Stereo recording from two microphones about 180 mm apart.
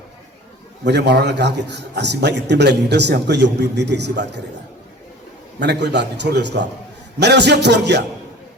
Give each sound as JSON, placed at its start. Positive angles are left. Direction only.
{"t": 0.9, "sound": "a man's voice", "side_deg": -70}
{"t": 5.5, "sound": "a man's voice", "side_deg": -70}